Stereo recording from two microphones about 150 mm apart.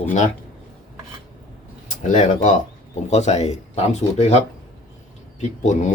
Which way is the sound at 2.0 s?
55° left (ahead or behind).